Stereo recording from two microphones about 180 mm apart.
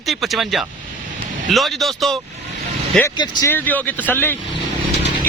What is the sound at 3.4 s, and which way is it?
Speech, 10° left (ahead or behind).